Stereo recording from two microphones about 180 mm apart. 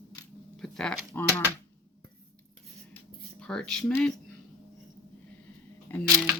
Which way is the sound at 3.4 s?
5° left (ahead or behind).